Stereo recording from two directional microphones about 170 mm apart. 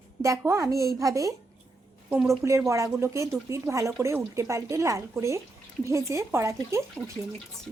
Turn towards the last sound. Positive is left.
turn(degrees=-15)  # may be behind; listen again after turning